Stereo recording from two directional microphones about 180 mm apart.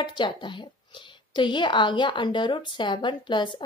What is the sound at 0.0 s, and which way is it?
A woman's voice, 25° left (ahead or behind).